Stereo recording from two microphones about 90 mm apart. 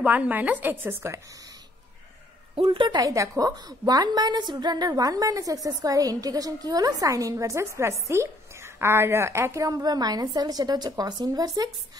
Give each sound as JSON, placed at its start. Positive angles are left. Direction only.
{"t": 0.0, "sound": "a woman's voice", "side_deg": -15}
{"t": 2.5, "sound": "a woman's voice", "side_deg": -80}
{"t": 3.0, "sound": "a woman's voice", "side_deg": -40}